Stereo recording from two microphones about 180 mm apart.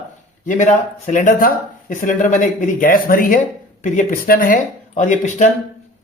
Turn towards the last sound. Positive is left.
turn(degrees=40)  # may be behind; listen again after turning